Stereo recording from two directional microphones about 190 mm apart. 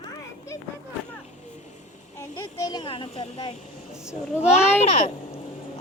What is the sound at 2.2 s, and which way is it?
A child's voice, 15° left (ahead or behind).